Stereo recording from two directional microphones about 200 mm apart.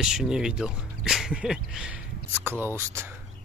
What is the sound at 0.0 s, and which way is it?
Speech, 5° right (ahead or behind).